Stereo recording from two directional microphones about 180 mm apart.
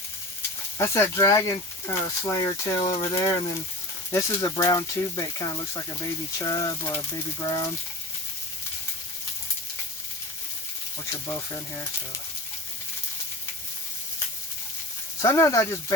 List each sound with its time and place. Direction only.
0.8 s speech: 15° left (ahead or behind)
2.4 s speech: 30° left (ahead or behind)
11.1 s speech: 15° left (ahead or behind)
15.2 s speech: 15° left (ahead or behind)